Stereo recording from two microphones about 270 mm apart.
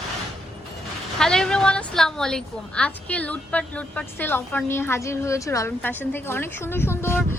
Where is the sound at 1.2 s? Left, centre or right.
Centre.